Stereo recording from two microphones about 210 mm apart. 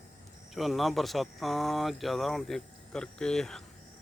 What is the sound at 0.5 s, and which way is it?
Speech, centre (ahead or behind).